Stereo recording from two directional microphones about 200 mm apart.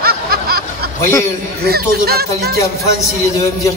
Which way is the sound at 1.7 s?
50° right (ahead or behind).